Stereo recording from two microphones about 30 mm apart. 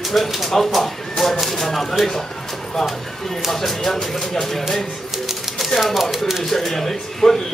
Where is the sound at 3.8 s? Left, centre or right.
Centre.